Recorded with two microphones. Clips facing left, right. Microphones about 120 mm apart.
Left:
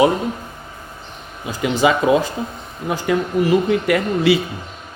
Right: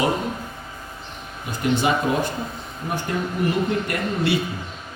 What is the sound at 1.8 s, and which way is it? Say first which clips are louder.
Speech: left 10 dB; 90° left.